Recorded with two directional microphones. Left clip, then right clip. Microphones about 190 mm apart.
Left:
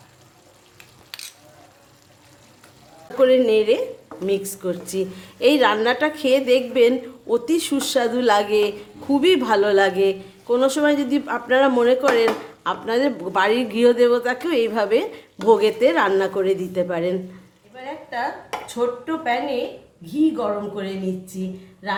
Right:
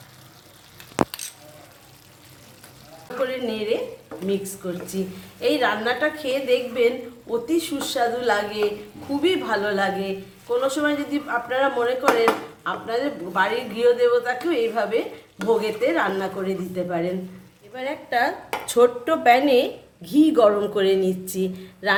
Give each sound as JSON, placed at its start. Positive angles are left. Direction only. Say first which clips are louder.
{"t": 3.2, "sound": "a woman's voice", "louder": "left 11 dB", "side_deg": 60}
{"t": 17.7, "sound": "a woman's voice", "louder": "right 5 dB", "side_deg": -55}